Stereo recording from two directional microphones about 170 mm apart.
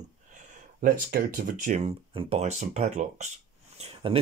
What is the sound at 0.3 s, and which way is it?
Speech, 50° right (ahead or behind).